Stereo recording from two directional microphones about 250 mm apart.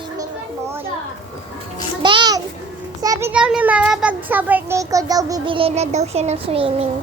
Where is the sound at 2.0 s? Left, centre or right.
Centre.